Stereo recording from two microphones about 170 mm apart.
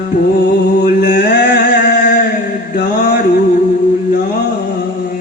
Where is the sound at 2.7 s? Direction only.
65° left (ahead or behind).